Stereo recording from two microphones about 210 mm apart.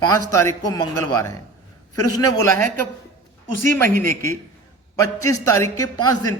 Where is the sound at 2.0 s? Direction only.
90° left.